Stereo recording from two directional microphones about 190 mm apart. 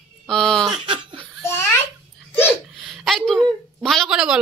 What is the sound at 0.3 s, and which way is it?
Speech, 5° left (ahead or behind).